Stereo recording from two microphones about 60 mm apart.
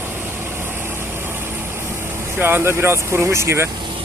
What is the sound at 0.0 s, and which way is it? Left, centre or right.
Vehicle, right.